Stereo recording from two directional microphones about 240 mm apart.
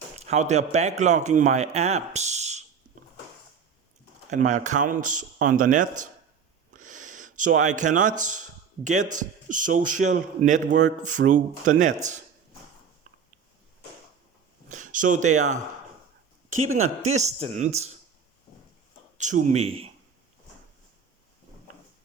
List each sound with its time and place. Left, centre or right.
0.2 s a man's voice: right
4.3 s a man's voice: right
14.7 s speech: right
16.7 s a man's voice: right
19.1 s a man's voice: right